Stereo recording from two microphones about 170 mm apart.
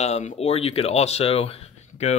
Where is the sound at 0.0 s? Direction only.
45° left (ahead or behind).